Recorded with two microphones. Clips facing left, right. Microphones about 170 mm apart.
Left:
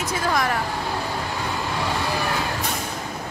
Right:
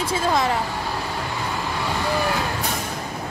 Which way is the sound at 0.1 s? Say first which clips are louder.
Right 2 dB; 25° right (ahead or behind).